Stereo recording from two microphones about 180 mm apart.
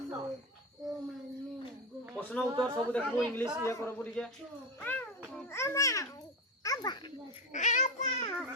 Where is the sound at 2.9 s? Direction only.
5° left (ahead or behind).